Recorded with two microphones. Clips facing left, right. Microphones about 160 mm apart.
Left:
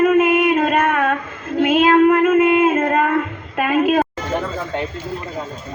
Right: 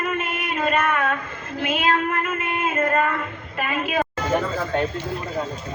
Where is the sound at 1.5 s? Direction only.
50° left (ahead or behind).